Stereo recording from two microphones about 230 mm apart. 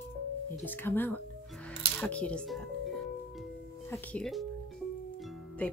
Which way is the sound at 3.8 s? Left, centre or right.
Centre.